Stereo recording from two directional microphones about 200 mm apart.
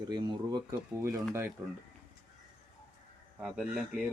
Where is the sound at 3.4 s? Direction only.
5° right (ahead or behind).